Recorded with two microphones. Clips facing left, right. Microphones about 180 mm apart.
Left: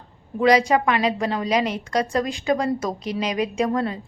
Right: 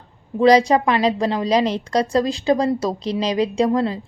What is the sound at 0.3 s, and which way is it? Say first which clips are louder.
A woman's voice: right 4 dB; 35° right (ahead or behind).